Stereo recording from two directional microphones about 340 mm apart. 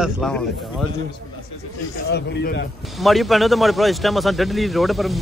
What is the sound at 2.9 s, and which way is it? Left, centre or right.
A man's voice, centre.